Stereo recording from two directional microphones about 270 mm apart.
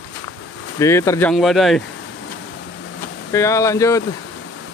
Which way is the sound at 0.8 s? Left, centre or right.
Centre.